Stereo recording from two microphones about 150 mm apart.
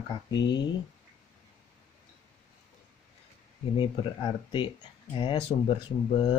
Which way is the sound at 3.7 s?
30° left (ahead or behind).